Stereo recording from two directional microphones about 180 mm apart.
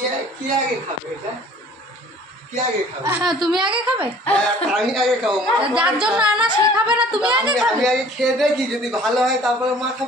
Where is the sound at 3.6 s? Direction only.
25° right (ahead or behind).